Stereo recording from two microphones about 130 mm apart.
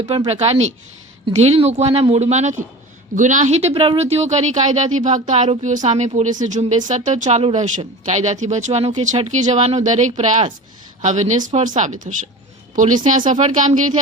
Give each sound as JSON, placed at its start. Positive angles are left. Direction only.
{"t": 0.3, "sound": "speech", "side_deg": -50}
{"t": 3.2, "sound": "a woman's voice", "side_deg": -70}
{"t": 13.1, "sound": "speech", "side_deg": -75}